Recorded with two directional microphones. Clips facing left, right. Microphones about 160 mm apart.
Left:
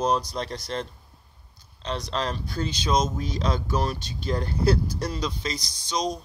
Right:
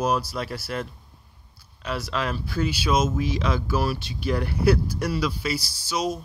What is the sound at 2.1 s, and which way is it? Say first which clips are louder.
Speech: right 1 dB; 35° left (ahead or behind).